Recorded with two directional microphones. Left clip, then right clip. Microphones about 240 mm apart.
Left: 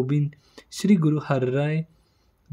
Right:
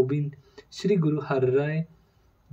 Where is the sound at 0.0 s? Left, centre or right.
Left.